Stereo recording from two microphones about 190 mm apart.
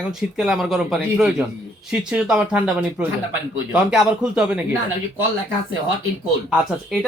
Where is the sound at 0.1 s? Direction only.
Centre (ahead or behind).